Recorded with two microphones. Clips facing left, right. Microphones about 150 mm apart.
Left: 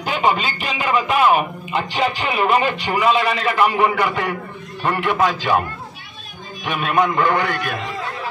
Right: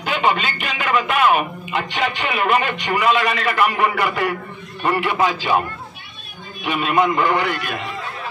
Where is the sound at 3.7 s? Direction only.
5° right (ahead or behind).